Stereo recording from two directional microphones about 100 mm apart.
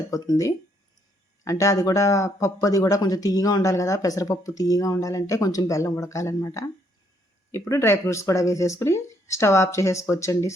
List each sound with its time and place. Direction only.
0.1 s speech: 35° left (ahead or behind)
7.7 s speech: 25° left (ahead or behind)